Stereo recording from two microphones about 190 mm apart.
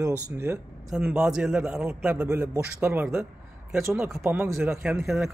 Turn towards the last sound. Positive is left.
turn(degrees=-5)  # may be behind; listen again after turning